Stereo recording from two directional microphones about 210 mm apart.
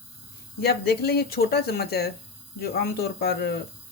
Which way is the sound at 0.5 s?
50° left (ahead or behind).